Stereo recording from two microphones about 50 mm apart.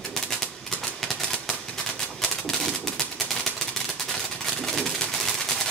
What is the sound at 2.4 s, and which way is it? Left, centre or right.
Typewriter, centre.